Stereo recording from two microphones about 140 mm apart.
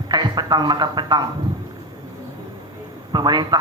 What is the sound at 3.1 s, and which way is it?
Speech, 30° right (ahead or behind).